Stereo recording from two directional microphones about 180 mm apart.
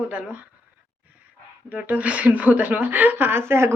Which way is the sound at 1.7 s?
10° right (ahead or behind).